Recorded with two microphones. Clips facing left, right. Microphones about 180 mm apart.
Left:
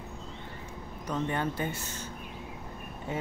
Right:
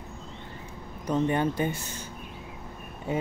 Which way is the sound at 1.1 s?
20° right (ahead or behind).